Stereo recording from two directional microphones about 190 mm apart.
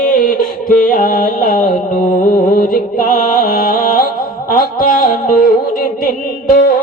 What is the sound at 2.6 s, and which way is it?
Music, 45° left (ahead or behind).